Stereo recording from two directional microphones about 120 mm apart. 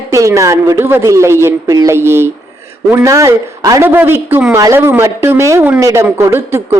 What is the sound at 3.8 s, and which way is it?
A man's voice, 15° right (ahead or behind).